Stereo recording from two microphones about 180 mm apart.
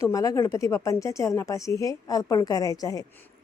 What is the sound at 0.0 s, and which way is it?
A woman's voice, 20° left (ahead or behind).